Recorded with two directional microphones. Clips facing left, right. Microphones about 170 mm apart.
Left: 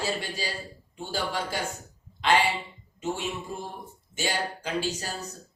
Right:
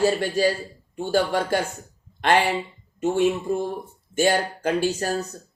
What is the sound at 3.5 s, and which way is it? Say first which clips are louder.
Speech: right 12 dB; 50° right (ahead or behind).